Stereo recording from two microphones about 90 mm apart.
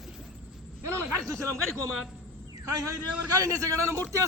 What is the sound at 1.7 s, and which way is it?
Speech, centre (ahead or behind).